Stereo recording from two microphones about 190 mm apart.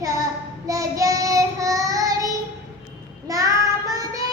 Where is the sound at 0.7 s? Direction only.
15° right (ahead or behind).